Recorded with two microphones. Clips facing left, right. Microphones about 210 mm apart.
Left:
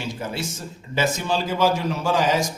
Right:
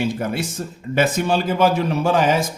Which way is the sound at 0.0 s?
55° right (ahead or behind).